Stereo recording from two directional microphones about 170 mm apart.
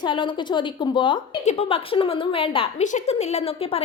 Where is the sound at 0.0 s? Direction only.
25° left (ahead or behind).